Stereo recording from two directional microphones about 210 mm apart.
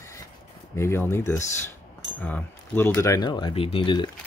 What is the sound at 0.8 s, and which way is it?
Speech, 10° left (ahead or behind).